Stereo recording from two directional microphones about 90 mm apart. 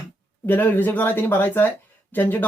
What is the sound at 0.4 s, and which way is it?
Speech, 20° left (ahead or behind).